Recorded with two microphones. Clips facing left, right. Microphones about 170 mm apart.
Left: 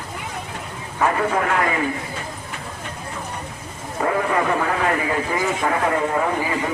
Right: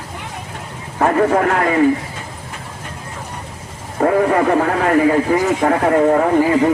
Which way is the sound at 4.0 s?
45° right (ahead or behind).